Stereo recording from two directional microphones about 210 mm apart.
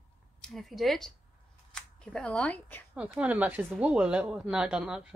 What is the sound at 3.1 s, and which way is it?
Speech, 5° right (ahead or behind).